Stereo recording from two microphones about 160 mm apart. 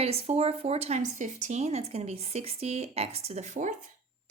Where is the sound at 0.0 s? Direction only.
40° right (ahead or behind).